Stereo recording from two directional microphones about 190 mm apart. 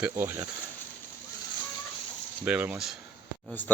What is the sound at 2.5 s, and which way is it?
Speech, 5° right (ahead or behind).